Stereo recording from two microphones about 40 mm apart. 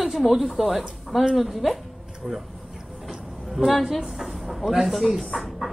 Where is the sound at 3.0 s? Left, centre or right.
Centre.